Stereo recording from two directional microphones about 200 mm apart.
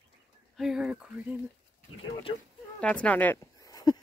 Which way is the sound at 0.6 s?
5° right (ahead or behind).